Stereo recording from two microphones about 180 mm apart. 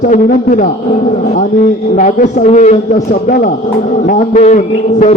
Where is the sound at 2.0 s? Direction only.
45° left (ahead or behind).